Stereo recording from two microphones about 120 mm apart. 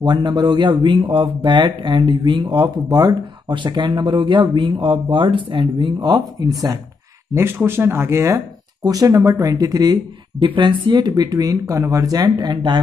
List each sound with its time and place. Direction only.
0.0 s speech: 40° right (ahead or behind)
7.3 s speech: 20° right (ahead or behind)
10.4 s speech: 45° right (ahead or behind)